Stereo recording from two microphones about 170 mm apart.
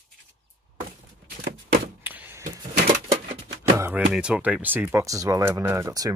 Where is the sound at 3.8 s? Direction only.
10° right (ahead or behind).